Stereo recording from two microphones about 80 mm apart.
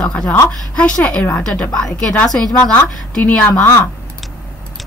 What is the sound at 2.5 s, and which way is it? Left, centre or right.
A woman's voice, left.